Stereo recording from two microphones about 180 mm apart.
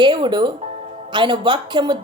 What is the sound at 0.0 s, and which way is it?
Speech, 25° right (ahead or behind).